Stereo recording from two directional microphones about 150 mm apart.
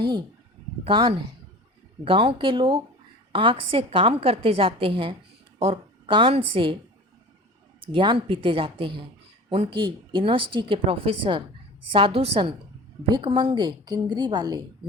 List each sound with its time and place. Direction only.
0.0 s a woman's voice: 30° right (ahead or behind)
7.9 s speech: 35° right (ahead or behind)